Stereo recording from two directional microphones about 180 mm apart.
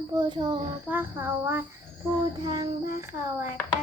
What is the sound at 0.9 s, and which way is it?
A child's voice, 10° right (ahead or behind).